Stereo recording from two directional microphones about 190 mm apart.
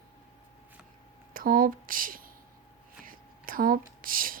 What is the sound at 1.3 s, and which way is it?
Speech, 50° right (ahead or behind).